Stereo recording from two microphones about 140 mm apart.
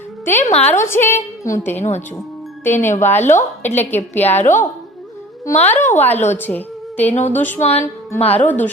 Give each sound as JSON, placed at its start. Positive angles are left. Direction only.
{"t": 0.4, "sound": "a woman's voice", "side_deg": 50}
{"t": 0.7, "sound": "a woman's voice", "side_deg": 15}
{"t": 1.7, "sound": "a woman's voice", "side_deg": 55}
{"t": 2.6, "sound": "a woman's voice", "side_deg": 15}
{"t": 7.1, "sound": "a woman's voice", "side_deg": 50}
{"t": 7.3, "sound": "a woman's voice", "side_deg": 15}
{"t": 8.2, "sound": "a woman's voice", "side_deg": 45}
{"t": 8.4, "sound": "a woman's voice", "side_deg": 15}